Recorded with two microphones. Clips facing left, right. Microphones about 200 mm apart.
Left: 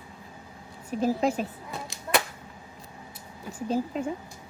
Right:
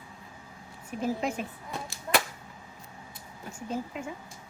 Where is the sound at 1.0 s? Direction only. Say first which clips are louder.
Left 5 dB; 35° left (ahead or behind).